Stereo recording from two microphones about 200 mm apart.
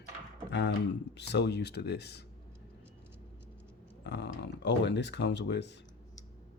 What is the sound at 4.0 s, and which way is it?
Speech, 60° left (ahead or behind).